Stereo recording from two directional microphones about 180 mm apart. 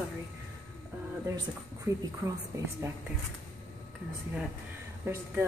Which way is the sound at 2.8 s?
15° right (ahead or behind).